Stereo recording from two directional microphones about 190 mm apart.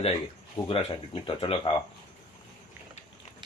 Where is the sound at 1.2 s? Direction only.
30° left (ahead or behind).